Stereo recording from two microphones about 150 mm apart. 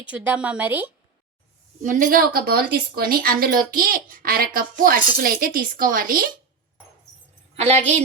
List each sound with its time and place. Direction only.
0.0 s speech: 10° right (ahead or behind)
1.8 s speech: 60° right (ahead or behind)
7.5 s a woman's voice: 45° right (ahead or behind)